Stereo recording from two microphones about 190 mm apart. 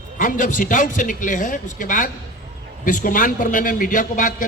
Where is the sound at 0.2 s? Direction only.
45° left (ahead or behind).